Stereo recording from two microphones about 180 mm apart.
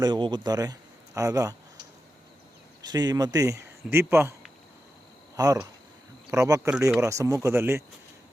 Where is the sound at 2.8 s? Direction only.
20° right (ahead or behind).